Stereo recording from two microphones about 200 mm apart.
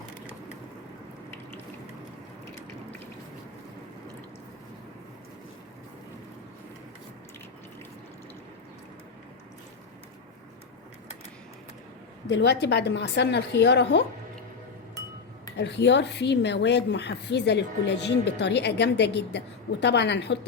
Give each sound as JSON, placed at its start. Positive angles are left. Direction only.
{"t": 12.3, "sound": "speech", "side_deg": 60}
{"t": 15.5, "sound": "speech", "side_deg": 60}